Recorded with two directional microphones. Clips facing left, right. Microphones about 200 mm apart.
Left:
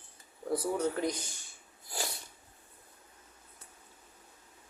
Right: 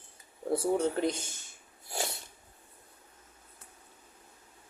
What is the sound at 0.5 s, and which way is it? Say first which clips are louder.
Speech: right 3 dB; 25° right (ahead or behind).